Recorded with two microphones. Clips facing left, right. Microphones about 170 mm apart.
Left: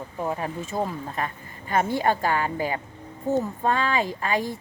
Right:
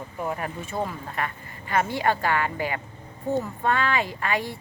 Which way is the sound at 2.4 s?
35° left (ahead or behind).